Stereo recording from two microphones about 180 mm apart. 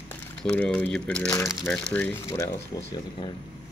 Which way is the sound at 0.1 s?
10° left (ahead or behind).